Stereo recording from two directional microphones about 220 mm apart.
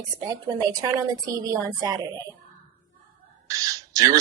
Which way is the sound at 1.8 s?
15° right (ahead or behind).